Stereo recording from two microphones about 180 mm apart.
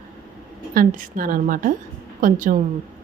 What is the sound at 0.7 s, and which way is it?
Speech, 50° right (ahead or behind).